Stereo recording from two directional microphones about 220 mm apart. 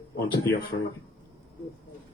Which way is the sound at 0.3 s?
45° left (ahead or behind).